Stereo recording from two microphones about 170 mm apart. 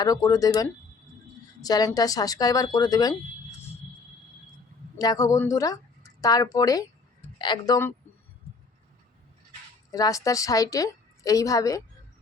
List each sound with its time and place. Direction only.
0.0 s a woman's voice: 20° left (ahead or behind)
4.9 s a woman's voice: 20° left (ahead or behind)
9.9 s a woman's voice: 20° left (ahead or behind)